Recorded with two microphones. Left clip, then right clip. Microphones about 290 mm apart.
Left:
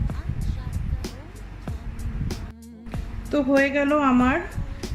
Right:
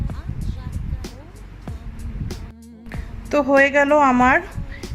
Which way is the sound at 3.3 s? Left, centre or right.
Right.